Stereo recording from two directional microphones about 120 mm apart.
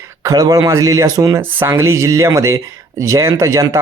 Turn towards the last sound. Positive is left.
turn(degrees=-25)  # may be behind; listen again after turning